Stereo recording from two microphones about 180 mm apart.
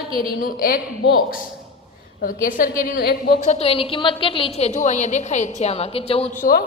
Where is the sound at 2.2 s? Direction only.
50° left (ahead or behind).